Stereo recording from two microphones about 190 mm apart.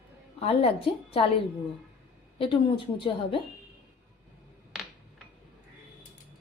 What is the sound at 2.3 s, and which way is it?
A woman's voice, 25° left (ahead or behind).